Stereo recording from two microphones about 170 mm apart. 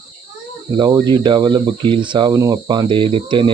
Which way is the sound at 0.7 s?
25° right (ahead or behind).